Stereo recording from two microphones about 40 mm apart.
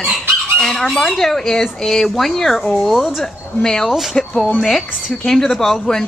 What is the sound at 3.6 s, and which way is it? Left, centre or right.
Speech, centre.